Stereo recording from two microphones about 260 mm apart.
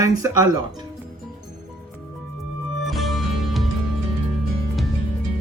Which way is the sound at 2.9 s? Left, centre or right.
Centre.